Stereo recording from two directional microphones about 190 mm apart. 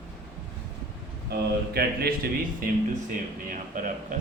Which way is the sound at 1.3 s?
55° right (ahead or behind).